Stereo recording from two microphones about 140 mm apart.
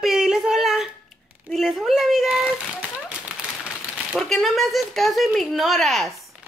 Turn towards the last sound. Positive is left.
turn(degrees=0)  # may be behind; listen again after turning